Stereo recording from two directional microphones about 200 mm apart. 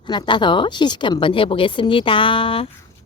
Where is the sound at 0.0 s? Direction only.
25° left (ahead or behind).